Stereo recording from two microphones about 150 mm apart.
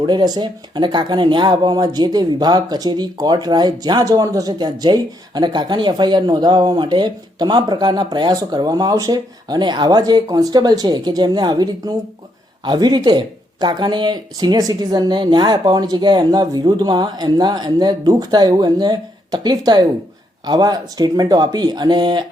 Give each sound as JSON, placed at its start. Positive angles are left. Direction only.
{"t": 0.0, "sound": "speech", "side_deg": -30}